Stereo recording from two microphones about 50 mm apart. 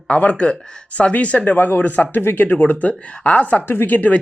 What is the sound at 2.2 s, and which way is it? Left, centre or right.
Speech, left.